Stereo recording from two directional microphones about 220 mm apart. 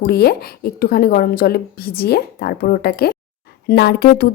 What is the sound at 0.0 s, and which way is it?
A woman's voice, 45° left (ahead or behind).